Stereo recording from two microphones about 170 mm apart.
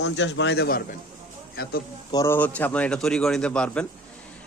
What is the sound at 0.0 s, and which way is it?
Speech, 90° left.